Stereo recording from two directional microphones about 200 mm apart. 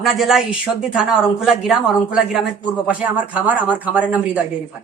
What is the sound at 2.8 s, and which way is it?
A man's voice, 5° right (ahead or behind).